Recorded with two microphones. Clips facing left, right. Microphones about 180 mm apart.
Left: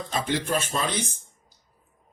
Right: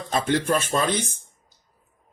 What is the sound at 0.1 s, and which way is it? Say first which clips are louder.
Speech: right 5 dB; 50° right (ahead or behind).